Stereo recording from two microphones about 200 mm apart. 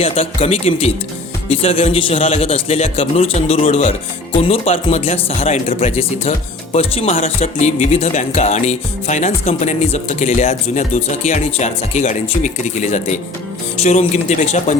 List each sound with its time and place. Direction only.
0.0 s a man's voice: 30° left (ahead or behind)